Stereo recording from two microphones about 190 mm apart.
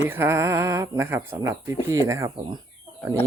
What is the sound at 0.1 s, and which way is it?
Speech, 10° right (ahead or behind).